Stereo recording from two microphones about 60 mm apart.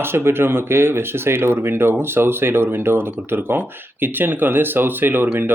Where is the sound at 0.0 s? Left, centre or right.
Right.